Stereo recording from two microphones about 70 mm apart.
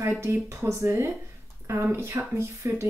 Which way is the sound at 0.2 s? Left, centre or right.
Right.